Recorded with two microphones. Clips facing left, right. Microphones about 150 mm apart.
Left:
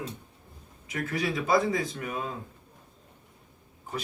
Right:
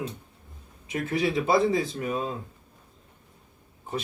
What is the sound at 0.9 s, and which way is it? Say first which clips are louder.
Speech: right 4 dB; 25° right (ahead or behind).